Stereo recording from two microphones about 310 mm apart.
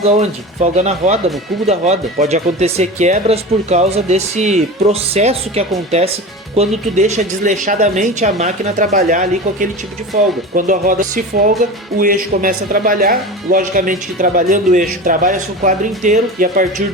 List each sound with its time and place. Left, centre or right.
0.2 s speech: right